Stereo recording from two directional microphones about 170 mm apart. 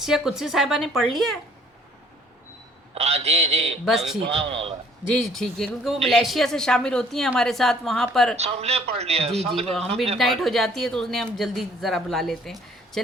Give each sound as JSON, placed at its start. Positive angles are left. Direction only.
{"t": 0.0, "sound": "speech", "side_deg": -5}
{"t": 2.9, "sound": "a man's voice", "side_deg": -40}
{"t": 3.8, "sound": "speech", "side_deg": 0}
{"t": 4.3, "sound": "a man's voice", "side_deg": -35}
{"t": 5.2, "sound": "speech", "side_deg": 0}
{"t": 8.4, "sound": "a man's voice", "side_deg": -40}
{"t": 10.2, "sound": "speech", "side_deg": 0}